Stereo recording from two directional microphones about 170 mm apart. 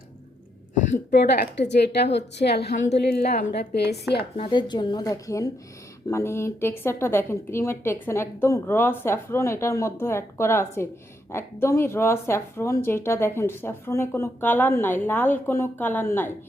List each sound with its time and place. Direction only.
1.1 s a woman's voice: 80° left
4.4 s a woman's voice: 30° left (ahead or behind); by 16.3 s 15° left (ahead or behind)